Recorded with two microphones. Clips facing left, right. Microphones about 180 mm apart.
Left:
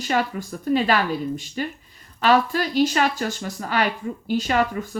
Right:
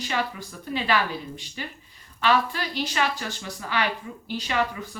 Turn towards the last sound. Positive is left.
turn(degrees=45)  # may be behind; listen again after turning